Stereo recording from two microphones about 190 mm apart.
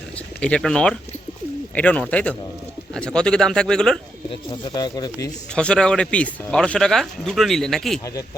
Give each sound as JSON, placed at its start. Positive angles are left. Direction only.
{"t": 0.3, "sound": "speech", "side_deg": 5}
{"t": 4.7, "sound": "speech", "side_deg": 20}
{"t": 5.5, "sound": "speech", "side_deg": 5}